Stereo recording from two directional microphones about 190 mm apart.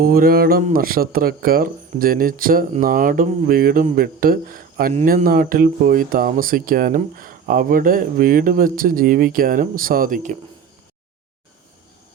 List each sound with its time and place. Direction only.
0.0 s speech: 50° right (ahead or behind)